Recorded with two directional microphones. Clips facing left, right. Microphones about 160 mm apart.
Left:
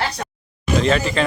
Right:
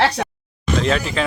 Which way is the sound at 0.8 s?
Centre (ahead or behind).